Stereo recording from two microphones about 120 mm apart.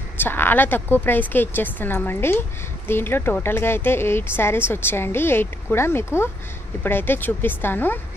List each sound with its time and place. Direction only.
0.2 s speech: 20° left (ahead or behind)